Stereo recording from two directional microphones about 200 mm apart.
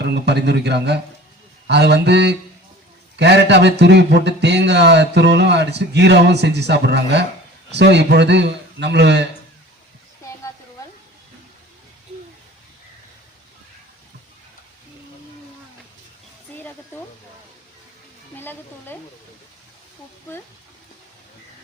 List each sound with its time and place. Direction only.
0.0 s speech: 55° right (ahead or behind)
18.3 s sizzle: 10° left (ahead or behind)